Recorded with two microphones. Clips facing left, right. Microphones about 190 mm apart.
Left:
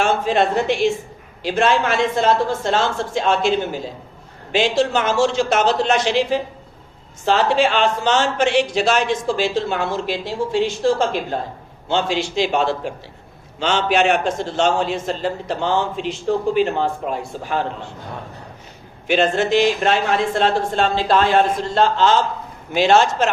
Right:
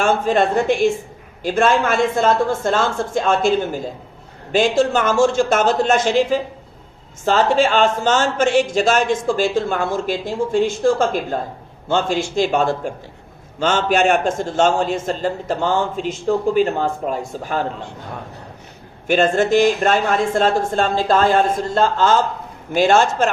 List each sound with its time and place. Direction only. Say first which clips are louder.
0.0 s a man's voice: right 1 dB; 50° right (ahead or behind)
19.0 s a man's voice: right 2 dB; 50° right (ahead or behind)